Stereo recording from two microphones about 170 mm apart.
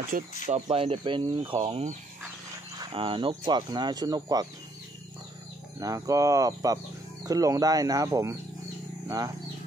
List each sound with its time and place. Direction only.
0.1 s speech: 60° right (ahead or behind)
0.7 s speech: 35° right (ahead or behind)
5.8 s speech: 20° right (ahead or behind)